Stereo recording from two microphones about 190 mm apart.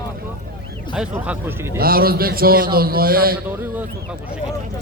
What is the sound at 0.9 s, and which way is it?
Speech, 5° right (ahead or behind).